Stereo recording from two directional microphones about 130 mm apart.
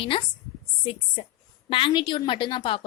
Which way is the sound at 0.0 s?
45° left (ahead or behind).